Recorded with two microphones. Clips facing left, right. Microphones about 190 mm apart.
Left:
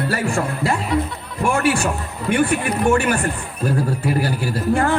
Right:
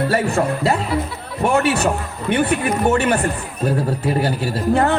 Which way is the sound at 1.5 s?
25° right (ahead or behind).